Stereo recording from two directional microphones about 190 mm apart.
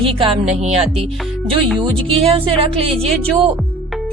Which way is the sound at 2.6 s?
30° right (ahead or behind).